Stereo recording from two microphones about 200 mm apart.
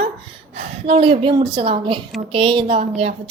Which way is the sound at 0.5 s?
30° right (ahead or behind).